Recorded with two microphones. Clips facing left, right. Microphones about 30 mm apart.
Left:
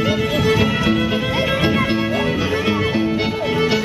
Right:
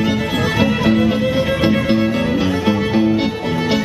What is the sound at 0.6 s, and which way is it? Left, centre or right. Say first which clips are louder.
Music: right 3 dB; centre.